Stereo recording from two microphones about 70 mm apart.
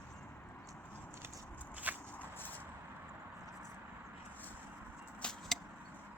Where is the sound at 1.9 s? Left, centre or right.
Right.